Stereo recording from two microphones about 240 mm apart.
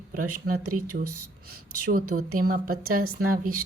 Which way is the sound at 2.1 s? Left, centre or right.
Right.